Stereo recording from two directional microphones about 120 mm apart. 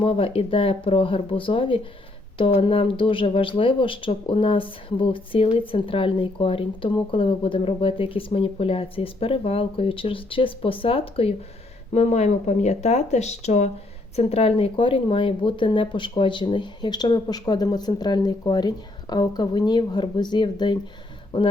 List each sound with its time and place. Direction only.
0.0 s speech: 50° left (ahead or behind)
11.9 s speech: 70° left (ahead or behind)
14.2 s speech: 60° left (ahead or behind); by 20.7 s 40° left (ahead or behind)